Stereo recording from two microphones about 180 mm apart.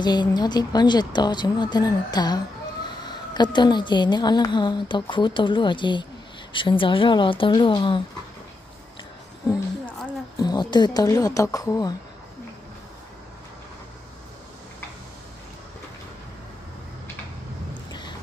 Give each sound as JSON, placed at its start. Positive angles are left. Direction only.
{"t": 0.0, "sound": "a woman's voice", "side_deg": 25}
{"t": 10.4, "sound": "a woman's voice", "side_deg": 25}